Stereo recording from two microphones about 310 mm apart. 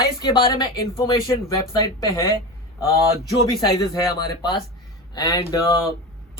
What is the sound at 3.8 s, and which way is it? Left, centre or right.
Speech, centre.